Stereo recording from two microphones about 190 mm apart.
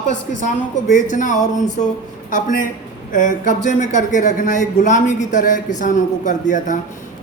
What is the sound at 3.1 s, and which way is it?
Speech, 45° left (ahead or behind).